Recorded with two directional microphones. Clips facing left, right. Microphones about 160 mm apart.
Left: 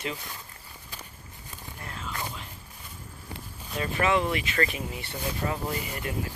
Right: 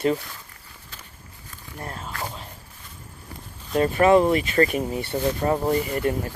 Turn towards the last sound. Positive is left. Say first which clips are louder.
# right 10 dB
turn(degrees=-40)  # may be behind; listen again after turning